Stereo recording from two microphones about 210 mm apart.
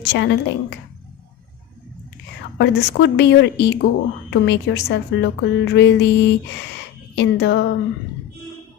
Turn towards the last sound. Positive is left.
turn(degrees=55)  # may be behind; listen again after turning